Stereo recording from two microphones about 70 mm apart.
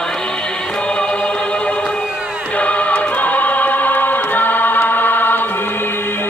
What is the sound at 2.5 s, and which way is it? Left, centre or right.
Choir, centre.